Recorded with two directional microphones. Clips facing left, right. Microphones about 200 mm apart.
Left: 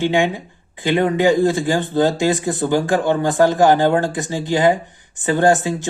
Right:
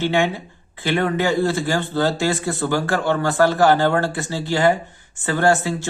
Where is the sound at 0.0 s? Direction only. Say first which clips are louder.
Left 2 dB; 15° left (ahead or behind).